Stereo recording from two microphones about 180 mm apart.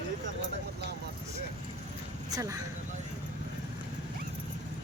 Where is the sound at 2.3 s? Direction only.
20° right (ahead or behind).